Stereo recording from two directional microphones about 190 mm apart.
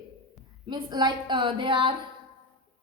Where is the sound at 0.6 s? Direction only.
25° right (ahead or behind).